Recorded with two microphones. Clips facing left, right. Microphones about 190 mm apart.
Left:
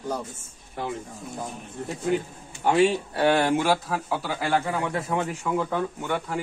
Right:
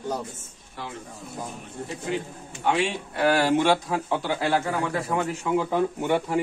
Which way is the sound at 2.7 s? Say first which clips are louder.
Left 4 dB; 40° left (ahead or behind).